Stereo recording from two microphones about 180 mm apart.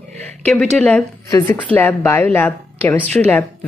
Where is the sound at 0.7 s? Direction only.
10° left (ahead or behind).